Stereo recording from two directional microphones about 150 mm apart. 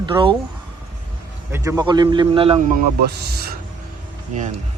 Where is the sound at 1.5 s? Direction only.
20° right (ahead or behind); by 2.6 s 40° right (ahead or behind).